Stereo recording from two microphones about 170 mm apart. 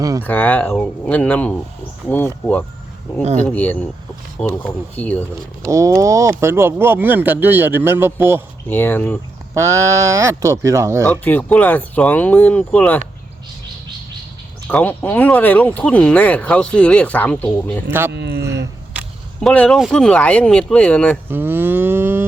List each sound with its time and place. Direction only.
0.2 s speech: 10° left (ahead or behind)
5.6 s speech: 15° right (ahead or behind)
8.6 s speech: 10° left (ahead or behind)
9.6 s speech: 15° right (ahead or behind)
11.0 s speech: 10° left (ahead or behind)
14.7 s speech: 10° left (ahead or behind)
18.1 s speech: 75° right (ahead or behind)
19.4 s speech: 5° left (ahead or behind)
21.2 s livestock: 10° right (ahead or behind)